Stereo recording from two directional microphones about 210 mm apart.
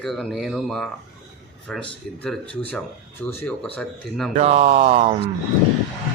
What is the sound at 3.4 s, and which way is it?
Speech, 5° left (ahead or behind).